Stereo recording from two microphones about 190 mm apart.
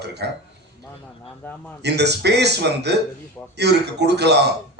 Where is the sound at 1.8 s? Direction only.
60° right (ahead or behind).